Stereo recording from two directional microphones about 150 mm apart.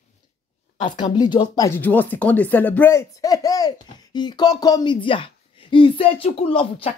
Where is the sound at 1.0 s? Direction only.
30° left (ahead or behind).